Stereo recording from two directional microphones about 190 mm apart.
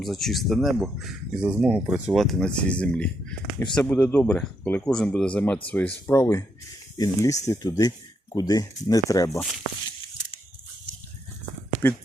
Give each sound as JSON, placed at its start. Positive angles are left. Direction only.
{"t": 0.0, "sound": "speech", "side_deg": 0}
{"t": 11.8, "sound": "speech", "side_deg": 10}